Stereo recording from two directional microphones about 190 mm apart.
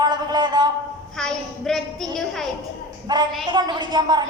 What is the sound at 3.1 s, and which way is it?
Speech, 20° right (ahead or behind).